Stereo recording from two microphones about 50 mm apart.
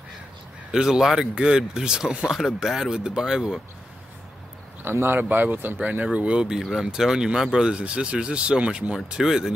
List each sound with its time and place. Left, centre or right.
0.7 s speech: centre
4.8 s speech: right
5.8 s speech: right
8.9 s speech: centre